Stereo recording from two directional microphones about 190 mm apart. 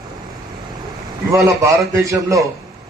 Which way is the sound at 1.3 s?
15° right (ahead or behind).